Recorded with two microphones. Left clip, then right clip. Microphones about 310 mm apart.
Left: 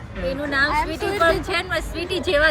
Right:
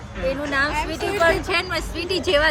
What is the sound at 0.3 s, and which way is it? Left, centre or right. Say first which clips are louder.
Speech: left 1 dB; centre.